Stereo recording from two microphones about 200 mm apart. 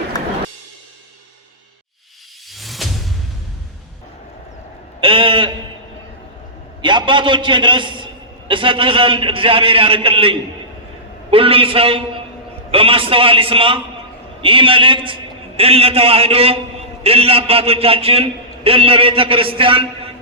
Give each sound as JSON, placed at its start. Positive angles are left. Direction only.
{"t": 0.1, "sound": "music", "side_deg": 20}
{"t": 2.5, "sound": "music", "side_deg": 0}
{"t": 4.9, "sound": "a sound", "side_deg": -25}
{"t": 6.8, "sound": "a man's voice", "side_deg": -25}